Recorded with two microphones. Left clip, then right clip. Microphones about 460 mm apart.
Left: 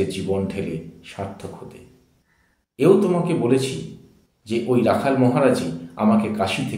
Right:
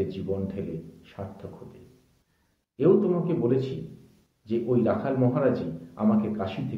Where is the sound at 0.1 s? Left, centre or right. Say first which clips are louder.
Left 7 dB; right.